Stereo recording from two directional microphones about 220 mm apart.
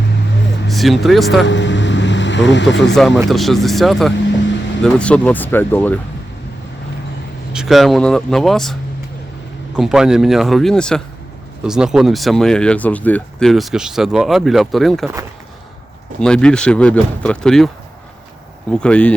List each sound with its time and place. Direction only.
0.7 s speech: centre (ahead or behind)
1.5 s vehicle: 55° left (ahead or behind)
3.2 s speech: centre (ahead or behind)
7.5 s speech: centre (ahead or behind)
9.7 s speech: 5° right (ahead or behind)
16.2 s speech: 5° left (ahead or behind)
18.7 s speech: 5° left (ahead or behind)